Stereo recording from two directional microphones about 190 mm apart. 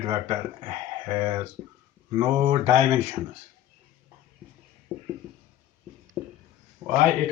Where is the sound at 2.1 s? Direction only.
20° right (ahead or behind).